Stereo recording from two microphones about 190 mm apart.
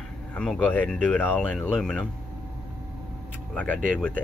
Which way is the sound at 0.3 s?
5° left (ahead or behind).